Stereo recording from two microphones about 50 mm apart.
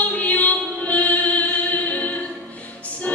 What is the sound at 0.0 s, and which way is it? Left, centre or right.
Music, left.